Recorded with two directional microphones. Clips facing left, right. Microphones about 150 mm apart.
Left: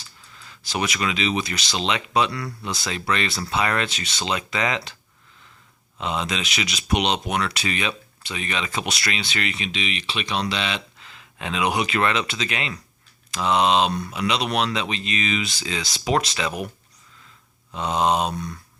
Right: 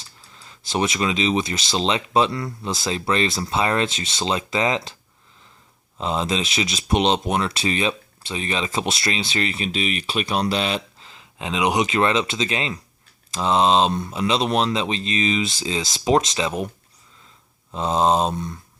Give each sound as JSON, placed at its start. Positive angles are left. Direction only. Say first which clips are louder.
{"t": 0.0, "sound": "speech", "louder": "even", "side_deg": -25}
{"t": 6.0, "sound": "speech", "louder": "right 3 dB", "side_deg": -30}